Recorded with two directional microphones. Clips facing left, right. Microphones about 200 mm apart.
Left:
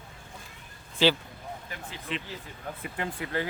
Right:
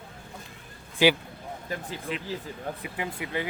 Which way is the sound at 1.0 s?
15° right (ahead or behind).